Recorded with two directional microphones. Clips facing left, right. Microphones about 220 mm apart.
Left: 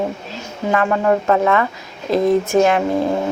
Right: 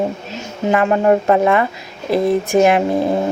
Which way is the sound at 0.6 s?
20° right (ahead or behind).